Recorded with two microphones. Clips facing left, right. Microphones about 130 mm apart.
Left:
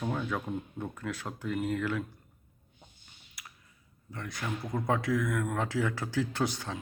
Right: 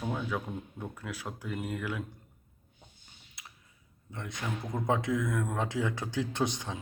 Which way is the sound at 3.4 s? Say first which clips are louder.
Left 1 dB; 25° right (ahead or behind).